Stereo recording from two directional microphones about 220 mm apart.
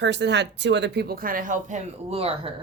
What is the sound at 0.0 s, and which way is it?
Speech, 50° right (ahead or behind).